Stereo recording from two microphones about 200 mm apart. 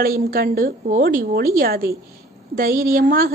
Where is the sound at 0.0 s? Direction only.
50° right (ahead or behind).